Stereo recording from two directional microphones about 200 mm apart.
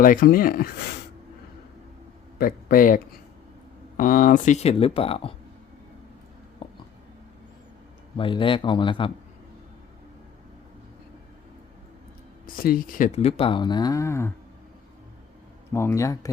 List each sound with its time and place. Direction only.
0.0 s speech: 45° left (ahead or behind)
2.4 s speech: 45° left (ahead or behind); by 5.3 s 30° left (ahead or behind)
6.6 s a sound: 25° left (ahead or behind)
8.1 s speech: 25° left (ahead or behind)
12.5 s speech: 45° left (ahead or behind); by 14.3 s 15° left (ahead or behind)
15.7 s speech: 15° left (ahead or behind)